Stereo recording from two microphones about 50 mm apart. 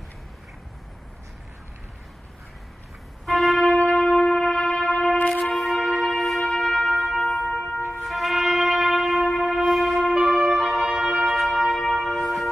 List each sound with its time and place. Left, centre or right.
3.3 s music: centre
3.6 s shofar: left
5.6 s music: centre
7.4 s music: left
8.0 s brass instrument: centre
9.3 s music: centre
10.1 s music: centre
10.5 s brass instrument: centre
11.3 s music: centre